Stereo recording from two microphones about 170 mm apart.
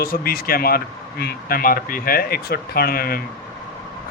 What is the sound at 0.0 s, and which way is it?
Speech, 60° left (ahead or behind).